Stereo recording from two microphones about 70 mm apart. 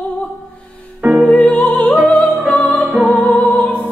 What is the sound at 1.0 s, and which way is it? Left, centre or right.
Music, centre.